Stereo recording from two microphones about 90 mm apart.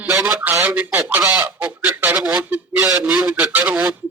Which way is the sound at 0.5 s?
20° right (ahead or behind).